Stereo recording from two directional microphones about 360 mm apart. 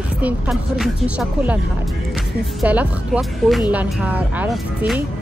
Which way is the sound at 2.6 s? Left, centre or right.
Centre.